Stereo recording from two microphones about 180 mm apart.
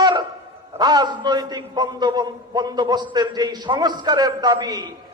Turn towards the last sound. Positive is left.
turn(degrees=-20)  # may be behind; listen again after turning